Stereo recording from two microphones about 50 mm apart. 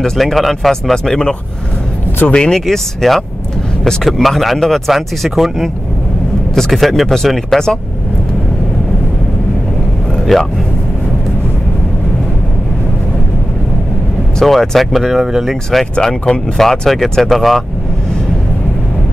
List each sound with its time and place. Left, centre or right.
0.0 s speech: centre
2.3 s speech: centre
2.6 s speech: centre
10.3 s speech: centre
14.4 s speech: centre